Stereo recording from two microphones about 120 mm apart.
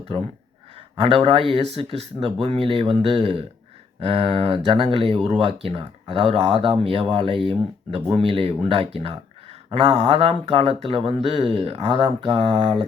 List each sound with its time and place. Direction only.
0.9 s speech: 50° right (ahead or behind)
5.3 s speech: 60° right (ahead or behind)
11.9 s speech: 40° right (ahead or behind)
12.3 s speech: 60° right (ahead or behind)